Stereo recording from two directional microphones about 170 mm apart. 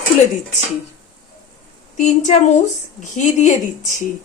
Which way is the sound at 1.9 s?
45° left (ahead or behind).